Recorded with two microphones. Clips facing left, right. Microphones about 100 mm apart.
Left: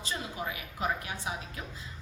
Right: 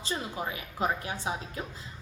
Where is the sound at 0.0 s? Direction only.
30° right (ahead or behind).